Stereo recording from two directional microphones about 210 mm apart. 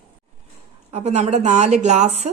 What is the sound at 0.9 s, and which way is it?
A woman's voice, 30° right (ahead or behind).